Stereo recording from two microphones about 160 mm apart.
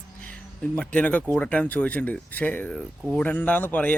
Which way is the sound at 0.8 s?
10° left (ahead or behind).